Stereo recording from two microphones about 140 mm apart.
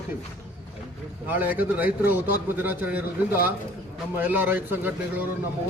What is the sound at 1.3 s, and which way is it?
A man's voice, 10° right (ahead or behind).